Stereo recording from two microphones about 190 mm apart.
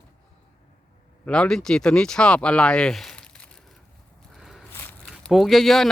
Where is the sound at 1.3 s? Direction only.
5° left (ahead or behind).